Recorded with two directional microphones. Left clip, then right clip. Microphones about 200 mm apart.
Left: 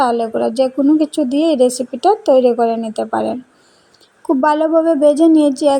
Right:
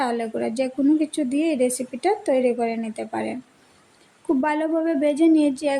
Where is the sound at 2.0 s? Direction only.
10° right (ahead or behind).